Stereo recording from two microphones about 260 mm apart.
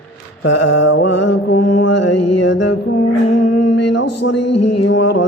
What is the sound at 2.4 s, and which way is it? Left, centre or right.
Speech, left.